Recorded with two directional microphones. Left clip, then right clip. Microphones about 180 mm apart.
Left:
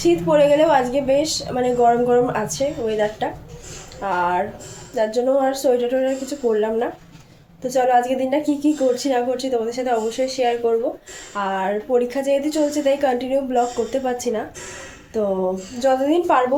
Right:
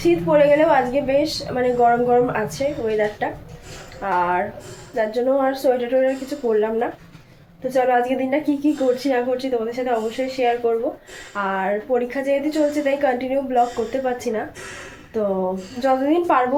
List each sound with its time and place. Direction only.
0.0 s a woman's voice: 20° left (ahead or behind)